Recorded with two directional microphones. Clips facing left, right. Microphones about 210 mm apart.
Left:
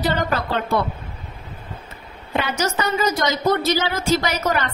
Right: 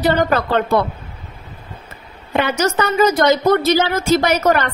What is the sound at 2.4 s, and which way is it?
A woman's voice, 65° right (ahead or behind).